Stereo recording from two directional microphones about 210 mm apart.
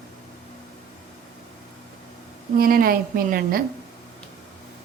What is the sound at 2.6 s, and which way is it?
A woman's voice, 45° right (ahead or behind).